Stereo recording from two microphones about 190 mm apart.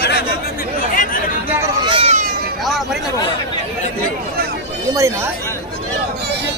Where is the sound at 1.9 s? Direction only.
30° right (ahead or behind).